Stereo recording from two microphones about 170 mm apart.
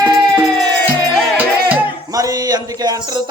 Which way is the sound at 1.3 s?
10° right (ahead or behind).